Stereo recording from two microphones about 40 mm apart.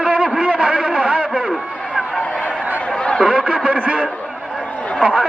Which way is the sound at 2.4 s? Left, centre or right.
Right.